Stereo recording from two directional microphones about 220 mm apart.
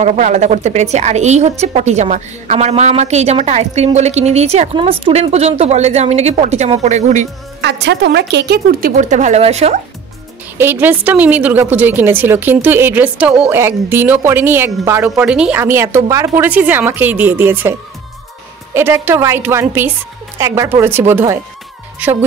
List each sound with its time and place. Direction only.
0.0 s a woman's voice: 35° right (ahead or behind)
7.6 s a woman's voice: 50° right (ahead or behind); by 9.8 s 30° right (ahead or behind)
10.6 s a woman's voice: 10° right (ahead or behind)